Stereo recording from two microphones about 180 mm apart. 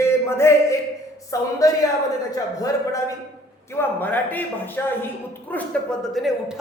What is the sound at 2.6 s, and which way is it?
A man's voice, 20° left (ahead or behind).